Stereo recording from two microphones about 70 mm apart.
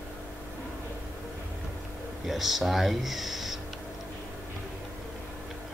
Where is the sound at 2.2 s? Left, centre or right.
Centre.